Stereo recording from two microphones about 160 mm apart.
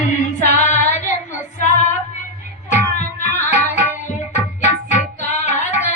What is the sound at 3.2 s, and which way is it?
Tabla, 50° left (ahead or behind).